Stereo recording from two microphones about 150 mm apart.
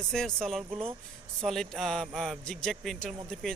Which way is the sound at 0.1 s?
5° left (ahead or behind).